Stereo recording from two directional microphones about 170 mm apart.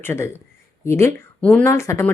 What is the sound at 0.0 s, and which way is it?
Speech, 15° left (ahead or behind).